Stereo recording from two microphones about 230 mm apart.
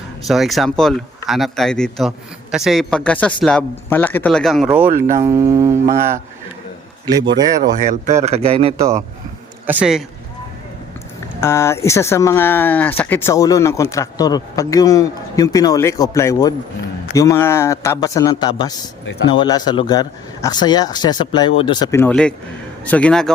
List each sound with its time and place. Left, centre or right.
0.3 s a man's voice: centre
5.2 s mantra: centre
7.3 s mantra: centre
7.6 s speech: right
8.2 s a man's voice: right
9.6 s a man's voice: centre
11.3 s a man's voice: centre